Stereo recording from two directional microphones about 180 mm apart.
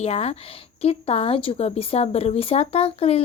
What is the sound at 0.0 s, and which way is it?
Speech, 35° left (ahead or behind).